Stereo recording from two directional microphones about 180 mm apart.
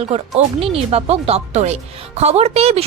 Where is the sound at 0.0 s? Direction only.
35° right (ahead or behind).